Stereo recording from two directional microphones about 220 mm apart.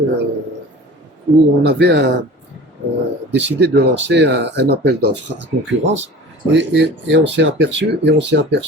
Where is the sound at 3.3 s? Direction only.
50° right (ahead or behind).